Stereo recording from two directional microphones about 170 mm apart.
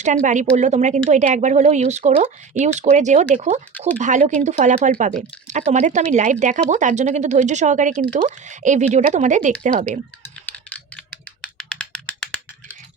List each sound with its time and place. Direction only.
0.0 s speech: 45° right (ahead or behind)
10.4 s typing: 10° left (ahead or behind)